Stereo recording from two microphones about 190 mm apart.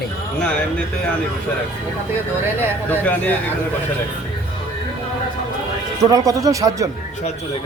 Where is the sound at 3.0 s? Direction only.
10° left (ahead or behind).